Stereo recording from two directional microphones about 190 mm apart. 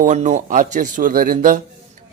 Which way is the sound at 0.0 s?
40° right (ahead or behind).